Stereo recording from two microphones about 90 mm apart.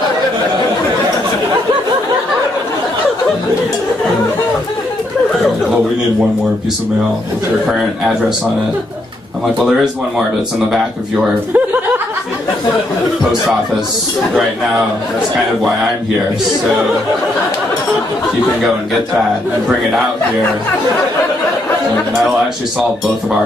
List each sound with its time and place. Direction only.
7.6 s speech: 5° right (ahead or behind)
11.5 s chuckle: 20° right (ahead or behind)
15.3 s a man's voice: 5° right (ahead or behind)